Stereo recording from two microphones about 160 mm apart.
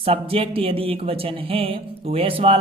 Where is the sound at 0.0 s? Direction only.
35° right (ahead or behind).